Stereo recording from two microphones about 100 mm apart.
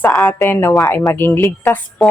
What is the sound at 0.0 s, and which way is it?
A woman's voice, 15° left (ahead or behind).